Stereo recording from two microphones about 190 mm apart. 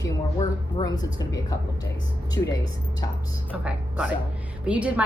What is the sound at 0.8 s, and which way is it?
A woman's voice, 20° left (ahead or behind).